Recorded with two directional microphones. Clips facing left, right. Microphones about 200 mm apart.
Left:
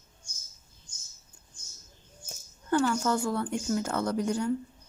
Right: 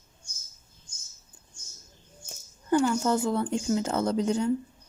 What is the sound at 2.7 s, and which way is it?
Speech, 15° right (ahead or behind).